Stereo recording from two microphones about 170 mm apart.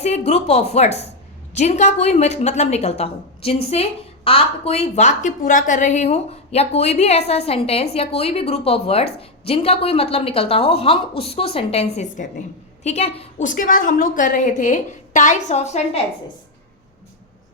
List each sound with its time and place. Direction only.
0.0 s a woman's voice: 40° left (ahead or behind)